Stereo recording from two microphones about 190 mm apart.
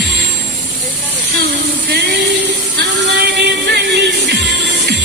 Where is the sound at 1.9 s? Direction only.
65° right (ahead or behind).